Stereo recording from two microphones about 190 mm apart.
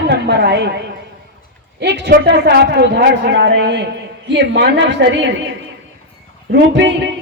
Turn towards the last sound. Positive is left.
turn(degrees=-70)  # may be behind; listen again after turning